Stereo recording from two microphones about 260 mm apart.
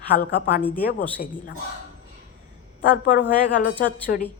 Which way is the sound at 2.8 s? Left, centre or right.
Left.